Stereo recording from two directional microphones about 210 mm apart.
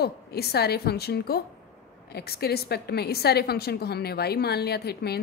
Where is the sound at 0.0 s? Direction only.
50° left (ahead or behind).